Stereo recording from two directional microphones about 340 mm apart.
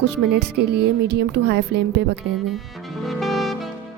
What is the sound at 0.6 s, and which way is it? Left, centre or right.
Speech, right.